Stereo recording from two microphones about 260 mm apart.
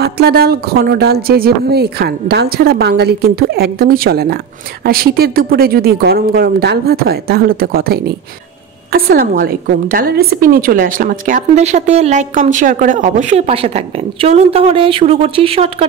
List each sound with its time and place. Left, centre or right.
0.0 s a woman's voice: right